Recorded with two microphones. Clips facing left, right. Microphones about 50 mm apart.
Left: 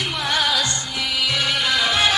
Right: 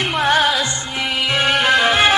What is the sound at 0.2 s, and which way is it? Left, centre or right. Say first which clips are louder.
Music: right 6 dB; right.